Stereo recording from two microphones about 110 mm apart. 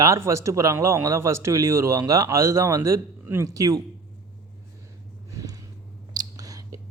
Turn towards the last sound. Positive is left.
turn(degrees=-30)  # may be behind; listen again after turning